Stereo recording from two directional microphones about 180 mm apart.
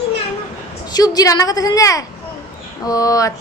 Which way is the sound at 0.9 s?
20° left (ahead or behind).